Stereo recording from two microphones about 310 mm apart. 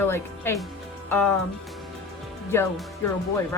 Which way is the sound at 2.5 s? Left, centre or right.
Centre.